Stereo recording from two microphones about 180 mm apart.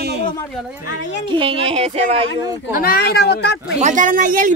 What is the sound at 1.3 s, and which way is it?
Speech, 30° right (ahead or behind).